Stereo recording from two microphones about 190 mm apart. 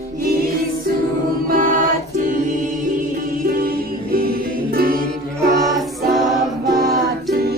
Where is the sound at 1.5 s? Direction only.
45° right (ahead or behind).